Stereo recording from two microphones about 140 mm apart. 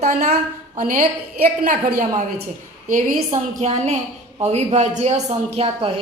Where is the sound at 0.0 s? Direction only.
50° right (ahead or behind).